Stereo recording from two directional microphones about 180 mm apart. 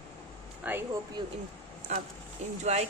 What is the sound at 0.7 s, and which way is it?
Speech, 10° right (ahead or behind).